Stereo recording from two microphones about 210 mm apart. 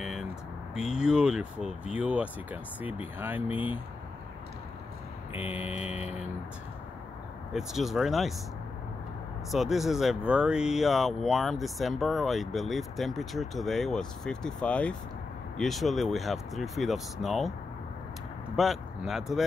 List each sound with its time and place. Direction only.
0.7 s speech: 5° right (ahead or behind)
5.4 s speech: 10° right (ahead or behind)
5.8 s vehicle: 30° left (ahead or behind)
7.5 s speech: centre (ahead or behind)
9.5 s speech: centre (ahead or behind)
18.6 s speech: centre (ahead or behind)